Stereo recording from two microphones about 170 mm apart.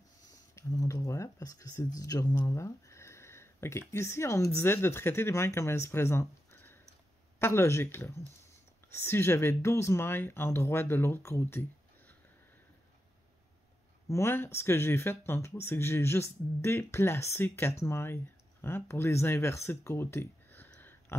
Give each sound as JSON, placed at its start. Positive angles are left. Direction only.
{"t": 0.6, "sound": "a sound", "side_deg": 20}
{"t": 2.0, "sound": "speech", "side_deg": 20}
{"t": 14.0, "sound": "speech", "side_deg": 15}